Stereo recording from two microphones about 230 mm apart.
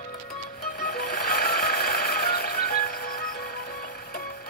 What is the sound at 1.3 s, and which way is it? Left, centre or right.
Music, left.